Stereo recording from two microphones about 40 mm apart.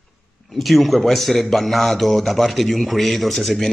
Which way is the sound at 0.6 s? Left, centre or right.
Centre.